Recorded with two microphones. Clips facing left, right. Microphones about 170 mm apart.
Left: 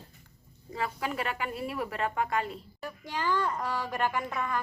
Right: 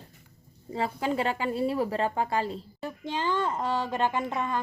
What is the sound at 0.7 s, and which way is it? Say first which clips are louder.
A woman's voice: right 5 dB; 30° right (ahead or behind).